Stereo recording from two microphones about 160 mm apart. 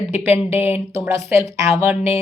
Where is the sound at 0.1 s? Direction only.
15° right (ahead or behind).